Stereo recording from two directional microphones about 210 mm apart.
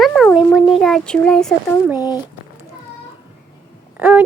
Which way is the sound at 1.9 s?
20° left (ahead or behind).